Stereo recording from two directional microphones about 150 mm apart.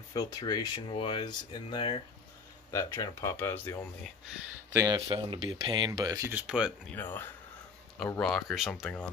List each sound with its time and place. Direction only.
0.1 s speech: 25° left (ahead or behind)
2.7 s speech: 20° left (ahead or behind)
4.7 s speech: 25° right (ahead or behind)
6.3 s speech: 5° right (ahead or behind)
6.9 s speech: 10° left (ahead or behind)